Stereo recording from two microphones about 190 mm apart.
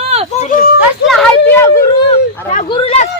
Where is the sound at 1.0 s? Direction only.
60° left (ahead or behind).